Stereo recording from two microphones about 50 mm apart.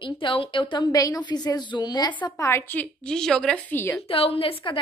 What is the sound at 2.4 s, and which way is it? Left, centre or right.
Speech, left.